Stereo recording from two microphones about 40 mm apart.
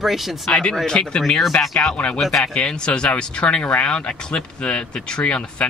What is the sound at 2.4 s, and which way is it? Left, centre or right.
Speech, left.